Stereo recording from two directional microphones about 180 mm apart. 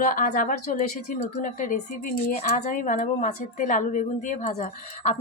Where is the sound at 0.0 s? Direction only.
50° left (ahead or behind).